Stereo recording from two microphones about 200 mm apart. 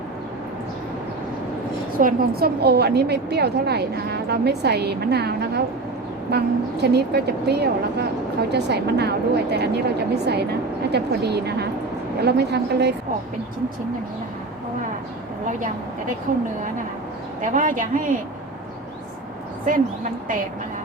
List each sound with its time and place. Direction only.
2.0 s a woman's voice: 45° right (ahead or behind)
16.3 s a woman's voice: 40° right (ahead or behind)